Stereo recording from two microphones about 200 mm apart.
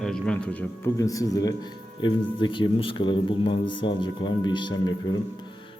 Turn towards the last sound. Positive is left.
turn(degrees=20)  # may be behind; listen again after turning